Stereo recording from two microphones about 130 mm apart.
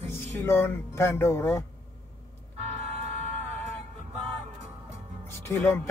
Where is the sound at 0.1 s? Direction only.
20° left (ahead or behind).